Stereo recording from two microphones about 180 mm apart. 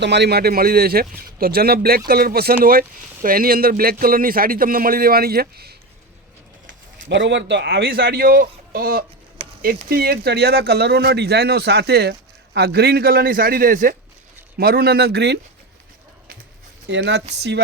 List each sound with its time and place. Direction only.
0.0 s a man's voice: 70° right (ahead or behind)
7.1 s a man's voice: 80° right
16.8 s speech: 75° right (ahead or behind)